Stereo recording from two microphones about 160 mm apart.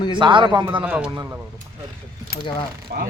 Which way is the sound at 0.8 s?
10° right (ahead or behind).